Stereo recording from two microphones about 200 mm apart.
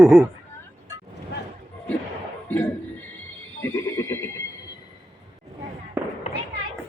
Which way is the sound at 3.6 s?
15° left (ahead or behind).